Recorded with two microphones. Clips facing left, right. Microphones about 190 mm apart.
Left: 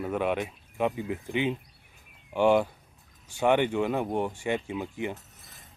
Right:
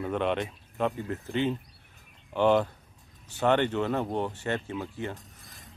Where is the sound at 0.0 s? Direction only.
5° left (ahead or behind).